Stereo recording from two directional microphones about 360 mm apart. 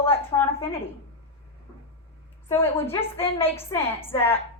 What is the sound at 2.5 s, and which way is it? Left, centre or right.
A woman's voice, centre.